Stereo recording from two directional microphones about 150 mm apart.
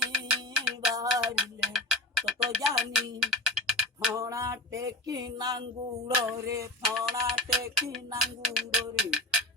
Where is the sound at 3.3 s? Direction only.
Centre (ahead or behind).